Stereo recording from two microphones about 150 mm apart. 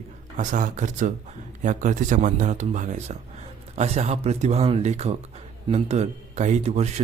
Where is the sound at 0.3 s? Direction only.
55° right (ahead or behind).